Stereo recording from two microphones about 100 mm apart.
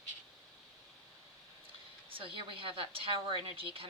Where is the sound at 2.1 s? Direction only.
60° right (ahead or behind).